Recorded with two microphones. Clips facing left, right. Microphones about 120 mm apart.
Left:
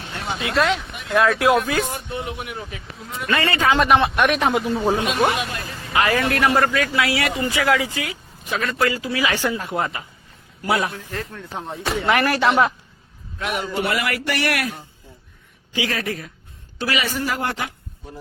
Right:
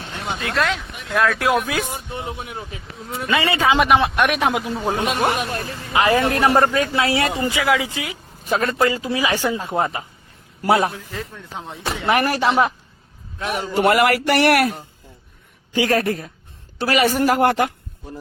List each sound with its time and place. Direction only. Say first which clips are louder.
0.2 s speech: left 1 dB; centre (ahead or behind)
1.9 s a man's voice: left 1 dB; 20° right (ahead or behind)
3.2 s a man's voice: right 1 dB; 10° right (ahead or behind)
5.9 s a man's voice: right 2 dB; 20° right (ahead or behind)
7.5 s speech: even; 15° right (ahead or behind)
8.4 s a man's voice: right 5 dB; 40° right (ahead or behind)
8.8 s a man's voice: right 2 dB; 25° right (ahead or behind)
9.3 s speech: right 2 dB; 15° right (ahead or behind)
9.7 s a man's voice: right 3 dB; 25° right (ahead or behind)
11.1 s a man's voice: left 1 dB; centre (ahead or behind)
12.0 s a man's voice: right 1 dB; 20° right (ahead or behind)
13.4 s a man's voice: right 3 dB; 30° right (ahead or behind)
13.8 s speech: right 8 dB; 45° right (ahead or behind)